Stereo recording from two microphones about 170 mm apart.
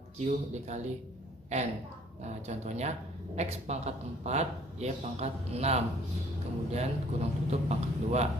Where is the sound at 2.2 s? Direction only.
40° right (ahead or behind).